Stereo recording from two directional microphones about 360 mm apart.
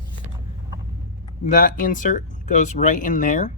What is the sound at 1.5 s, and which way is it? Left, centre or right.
Speech, left.